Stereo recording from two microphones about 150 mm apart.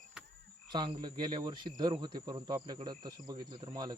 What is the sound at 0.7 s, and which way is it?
Speech, 30° right (ahead or behind).